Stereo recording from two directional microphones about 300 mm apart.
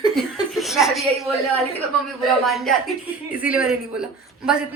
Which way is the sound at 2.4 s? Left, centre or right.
Centre.